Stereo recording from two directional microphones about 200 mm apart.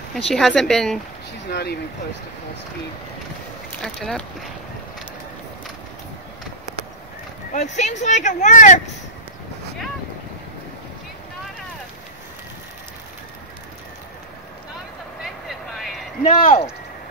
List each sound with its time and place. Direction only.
0.1 s speech: centre (ahead or behind)
1.5 s speech: 55° left (ahead or behind)
3.8 s speech: centre (ahead or behind)
7.5 s speech: 35° left (ahead or behind)
15.4 s vehicle: centre (ahead or behind)
16.3 s speech: 35° left (ahead or behind)